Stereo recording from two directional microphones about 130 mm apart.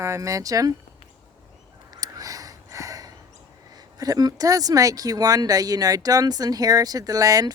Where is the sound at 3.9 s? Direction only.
30° right (ahead or behind).